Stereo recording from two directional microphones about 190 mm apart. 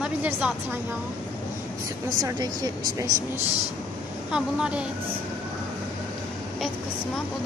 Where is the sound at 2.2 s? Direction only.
20° right (ahead or behind).